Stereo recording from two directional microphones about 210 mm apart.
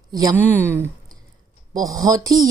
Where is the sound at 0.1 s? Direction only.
15° right (ahead or behind).